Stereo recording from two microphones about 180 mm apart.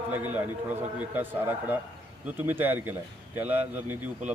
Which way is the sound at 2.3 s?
10° right (ahead or behind).